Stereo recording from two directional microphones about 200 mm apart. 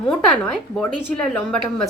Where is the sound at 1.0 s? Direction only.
5° left (ahead or behind).